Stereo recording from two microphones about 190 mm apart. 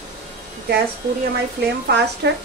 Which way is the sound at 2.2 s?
60° right (ahead or behind).